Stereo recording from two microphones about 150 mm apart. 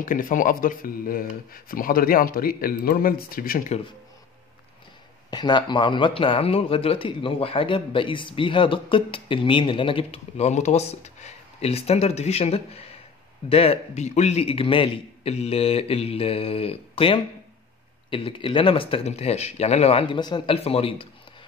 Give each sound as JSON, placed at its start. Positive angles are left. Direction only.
{"t": 0.0, "sound": "a man's voice", "side_deg": 60}
{"t": 5.3, "sound": "a man's voice", "side_deg": 30}